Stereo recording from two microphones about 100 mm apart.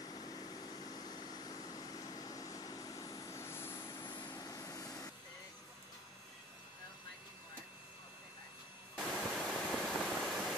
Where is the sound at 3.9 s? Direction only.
45° left (ahead or behind).